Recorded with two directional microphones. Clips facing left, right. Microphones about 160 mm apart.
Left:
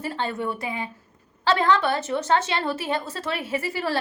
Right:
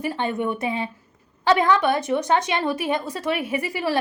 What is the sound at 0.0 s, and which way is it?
A woman's voice, 15° right (ahead or behind).